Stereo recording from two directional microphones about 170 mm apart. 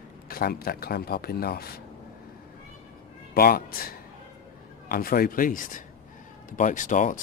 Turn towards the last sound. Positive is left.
turn(degrees=50)  # may be behind; listen again after turning